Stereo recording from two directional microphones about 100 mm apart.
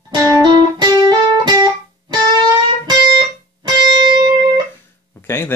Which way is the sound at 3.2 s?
45° right (ahead or behind).